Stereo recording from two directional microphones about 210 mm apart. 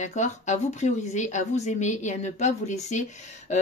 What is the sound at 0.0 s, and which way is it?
Speech, 35° left (ahead or behind).